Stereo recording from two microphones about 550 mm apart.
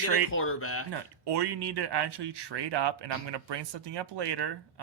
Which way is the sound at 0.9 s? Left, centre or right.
Right.